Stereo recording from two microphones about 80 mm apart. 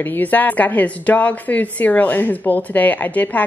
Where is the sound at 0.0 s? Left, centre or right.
Left.